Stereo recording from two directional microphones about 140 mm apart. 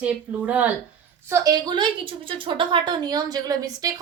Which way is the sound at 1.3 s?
30° right (ahead or behind).